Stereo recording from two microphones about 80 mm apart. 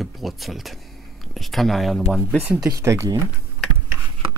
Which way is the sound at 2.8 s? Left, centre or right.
Right.